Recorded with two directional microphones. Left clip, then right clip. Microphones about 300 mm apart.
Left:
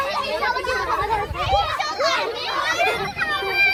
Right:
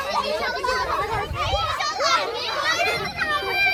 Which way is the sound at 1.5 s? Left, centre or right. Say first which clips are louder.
Left 5 dB; centre.